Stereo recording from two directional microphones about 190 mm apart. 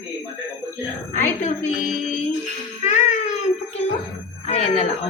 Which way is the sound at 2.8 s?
40° left (ahead or behind).